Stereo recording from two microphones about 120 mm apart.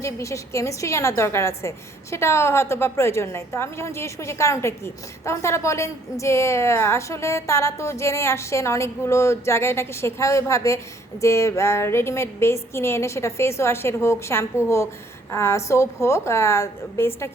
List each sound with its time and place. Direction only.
0.0 s a woman's voice: 25° left (ahead or behind)